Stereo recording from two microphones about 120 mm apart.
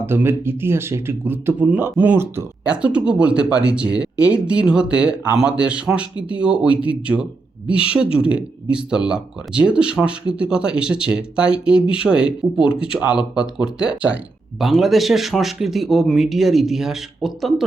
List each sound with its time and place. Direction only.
0.0 s a man's voice: 20° right (ahead or behind)
2.6 s a man's voice: 10° right (ahead or behind)